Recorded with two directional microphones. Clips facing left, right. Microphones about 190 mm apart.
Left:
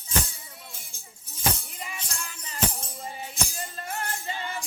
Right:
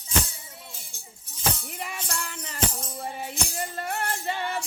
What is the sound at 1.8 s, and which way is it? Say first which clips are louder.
Music: right 5 dB; 60° right (ahead or behind).